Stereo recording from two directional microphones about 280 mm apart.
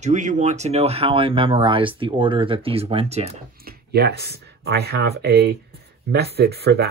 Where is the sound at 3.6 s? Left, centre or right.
Right.